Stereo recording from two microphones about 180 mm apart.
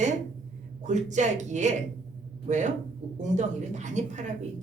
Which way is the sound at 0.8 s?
40° right (ahead or behind).